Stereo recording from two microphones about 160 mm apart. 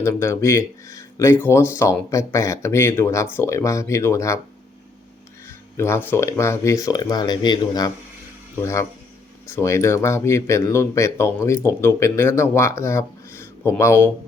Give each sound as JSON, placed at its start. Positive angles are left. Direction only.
{"t": 0.0, "sound": "speech", "side_deg": 15}
{"t": 5.5, "sound": "speech", "side_deg": 15}